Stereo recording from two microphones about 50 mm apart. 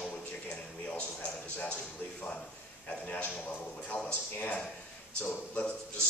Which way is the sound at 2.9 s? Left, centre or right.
Left.